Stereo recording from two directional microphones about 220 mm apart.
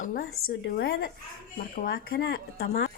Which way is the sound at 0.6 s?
50° left (ahead or behind).